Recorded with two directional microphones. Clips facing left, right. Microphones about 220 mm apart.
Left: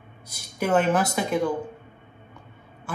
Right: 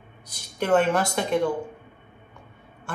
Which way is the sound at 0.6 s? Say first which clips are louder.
Even; 5° left (ahead or behind).